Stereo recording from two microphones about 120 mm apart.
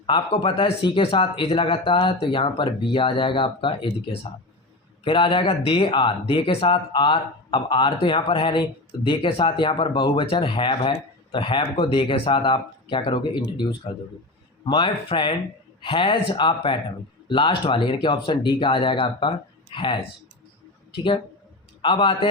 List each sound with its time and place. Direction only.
0.0 s a man's voice: 45° left (ahead or behind)